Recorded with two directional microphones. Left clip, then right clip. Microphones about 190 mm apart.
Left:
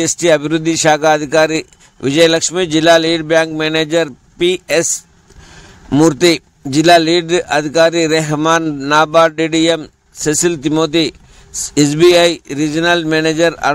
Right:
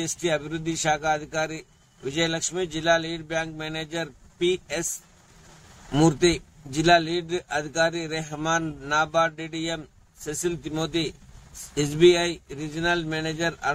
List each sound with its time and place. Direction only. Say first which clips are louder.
0.0 s speech: left 14 dB; 50° left (ahead or behind)
5.9 s speech: left 11 dB; 45° left (ahead or behind)